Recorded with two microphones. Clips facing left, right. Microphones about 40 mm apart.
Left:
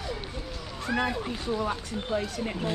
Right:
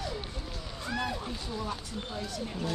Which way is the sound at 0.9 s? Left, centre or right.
Left.